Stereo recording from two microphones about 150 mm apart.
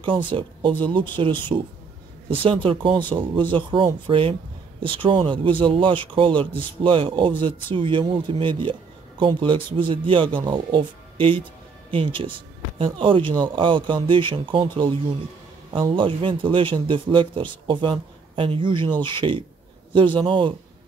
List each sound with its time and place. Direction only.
0.0 s speech: 35° right (ahead or behind)